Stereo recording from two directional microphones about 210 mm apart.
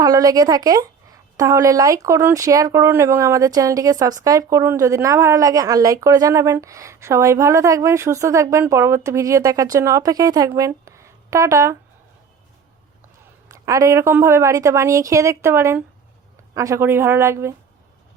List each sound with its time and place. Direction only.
0.0 s a woman's voice: 15° right (ahead or behind)
13.5 s a woman's voice: 15° right (ahead or behind)